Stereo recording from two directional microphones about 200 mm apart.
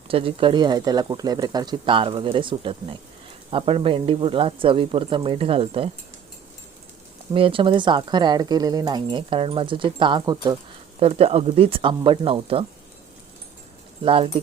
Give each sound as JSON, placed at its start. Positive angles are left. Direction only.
{"t": 0.1, "sound": "speech", "side_deg": -30}
{"t": 7.3, "sound": "speech", "side_deg": -25}
{"t": 14.0, "sound": "speech", "side_deg": -25}